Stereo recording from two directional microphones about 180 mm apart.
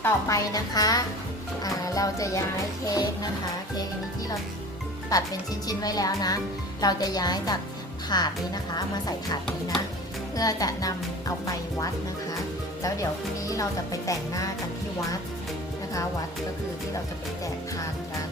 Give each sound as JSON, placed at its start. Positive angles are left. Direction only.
{"t": 0.0, "sound": "speech", "side_deg": 20}
{"t": 1.6, "sound": "music", "side_deg": 20}
{"t": 2.8, "sound": "speech", "side_deg": 20}
{"t": 5.1, "sound": "speech", "side_deg": 20}
{"t": 13.5, "sound": "speech", "side_deg": 20}